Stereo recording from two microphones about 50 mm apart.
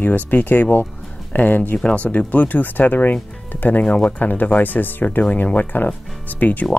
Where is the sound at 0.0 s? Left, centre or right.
Left.